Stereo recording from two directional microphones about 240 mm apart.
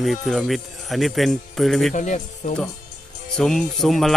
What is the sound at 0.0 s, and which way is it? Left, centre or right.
Speech, centre.